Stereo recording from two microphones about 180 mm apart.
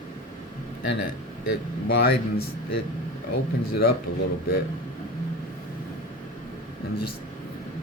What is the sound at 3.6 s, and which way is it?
Speech, 60° left (ahead or behind).